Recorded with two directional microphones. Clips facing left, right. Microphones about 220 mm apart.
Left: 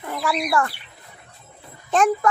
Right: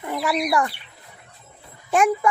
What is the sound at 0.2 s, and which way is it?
Speech, 20° right (ahead or behind).